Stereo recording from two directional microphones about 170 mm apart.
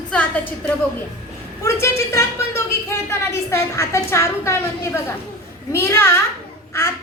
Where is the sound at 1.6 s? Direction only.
15° left (ahead or behind).